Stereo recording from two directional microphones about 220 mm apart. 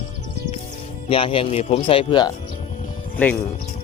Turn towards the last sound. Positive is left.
turn(degrees=5)  # may be behind; listen again after turning